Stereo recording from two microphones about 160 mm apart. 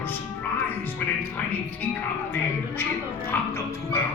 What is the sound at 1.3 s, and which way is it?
Speech, 10° left (ahead or behind).